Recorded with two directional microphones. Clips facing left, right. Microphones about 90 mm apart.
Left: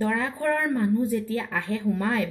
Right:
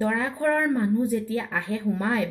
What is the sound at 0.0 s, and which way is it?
A woman's voice, 15° right (ahead or behind).